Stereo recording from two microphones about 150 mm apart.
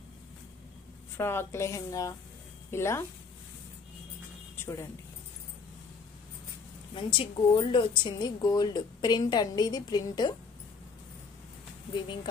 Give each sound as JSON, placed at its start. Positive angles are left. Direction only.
{"t": 1.1, "sound": "a woman's voice", "side_deg": 15}
{"t": 7.0, "sound": "a woman's voice", "side_deg": 35}
{"t": 11.9, "sound": "speech", "side_deg": 30}